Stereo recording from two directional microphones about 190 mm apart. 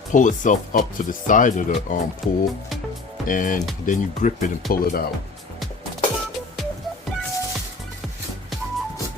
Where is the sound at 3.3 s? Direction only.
45° left (ahead or behind).